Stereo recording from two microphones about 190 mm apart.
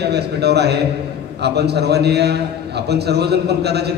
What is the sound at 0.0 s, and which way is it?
A man's voice, 60° right (ahead or behind).